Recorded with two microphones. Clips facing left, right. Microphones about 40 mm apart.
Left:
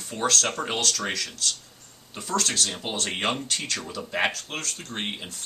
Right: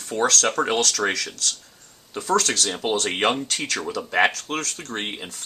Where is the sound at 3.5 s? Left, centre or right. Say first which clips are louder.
Right 3 dB; right.